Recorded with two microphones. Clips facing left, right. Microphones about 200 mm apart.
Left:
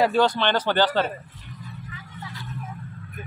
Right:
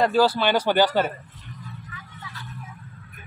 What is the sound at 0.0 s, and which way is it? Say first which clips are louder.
Speech: right 1 dB; 5° right (ahead or behind).